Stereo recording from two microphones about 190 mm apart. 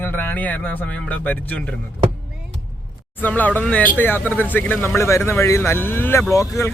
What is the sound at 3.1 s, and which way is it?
Speech, 10° left (ahead or behind).